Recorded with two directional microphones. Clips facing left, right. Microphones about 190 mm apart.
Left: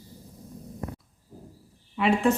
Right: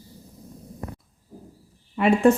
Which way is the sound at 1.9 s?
50° right (ahead or behind).